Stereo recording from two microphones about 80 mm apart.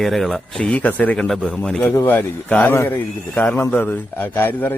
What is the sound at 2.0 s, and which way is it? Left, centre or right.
Speech, left.